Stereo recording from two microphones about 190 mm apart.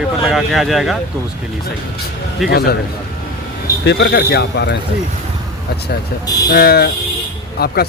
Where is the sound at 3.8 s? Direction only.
60° left (ahead or behind).